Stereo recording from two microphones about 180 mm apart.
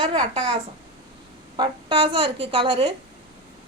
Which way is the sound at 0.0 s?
25° right (ahead or behind).